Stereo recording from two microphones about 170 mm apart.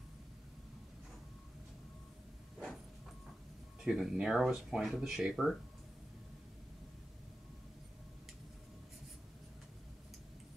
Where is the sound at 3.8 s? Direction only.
Centre (ahead or behind).